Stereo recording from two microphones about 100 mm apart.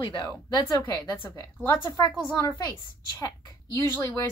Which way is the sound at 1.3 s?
25° left (ahead or behind).